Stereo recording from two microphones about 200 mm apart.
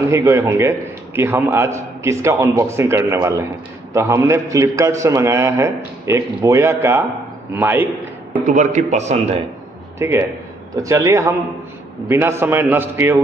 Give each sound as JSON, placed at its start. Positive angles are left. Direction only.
{"t": 0.1, "sound": "a man's voice", "side_deg": -15}
{"t": 8.5, "sound": "a man's voice", "side_deg": -35}
{"t": 9.9, "sound": "a man's voice", "side_deg": -15}